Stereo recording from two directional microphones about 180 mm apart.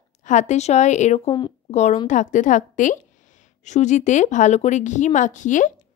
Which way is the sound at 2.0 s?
45° left (ahead or behind).